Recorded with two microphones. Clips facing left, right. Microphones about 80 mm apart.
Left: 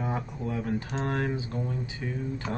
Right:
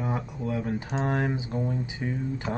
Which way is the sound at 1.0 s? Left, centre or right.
Centre.